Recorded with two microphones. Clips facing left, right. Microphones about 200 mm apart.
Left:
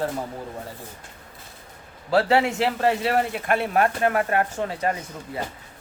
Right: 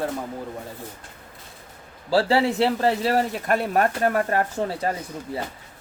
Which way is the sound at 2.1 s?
30° right (ahead or behind).